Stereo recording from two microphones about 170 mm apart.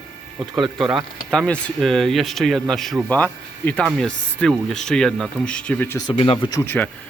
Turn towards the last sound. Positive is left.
turn(degrees=10)  # may be behind; listen again after turning